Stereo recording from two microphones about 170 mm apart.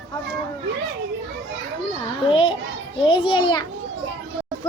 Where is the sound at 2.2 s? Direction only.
30° left (ahead or behind).